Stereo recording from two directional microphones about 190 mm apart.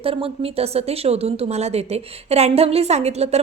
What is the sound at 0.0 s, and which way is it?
Speech, 30° right (ahead or behind).